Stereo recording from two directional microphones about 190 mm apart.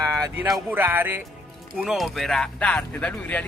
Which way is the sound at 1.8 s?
Centre (ahead or behind).